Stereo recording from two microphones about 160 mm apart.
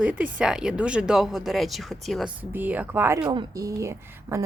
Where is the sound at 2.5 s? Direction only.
10° right (ahead or behind).